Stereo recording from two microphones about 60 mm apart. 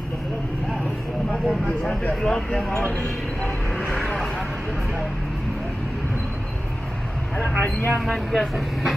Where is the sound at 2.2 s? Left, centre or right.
Centre.